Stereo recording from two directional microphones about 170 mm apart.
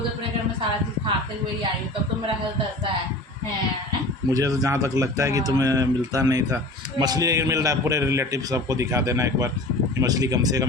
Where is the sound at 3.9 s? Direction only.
20° right (ahead or behind).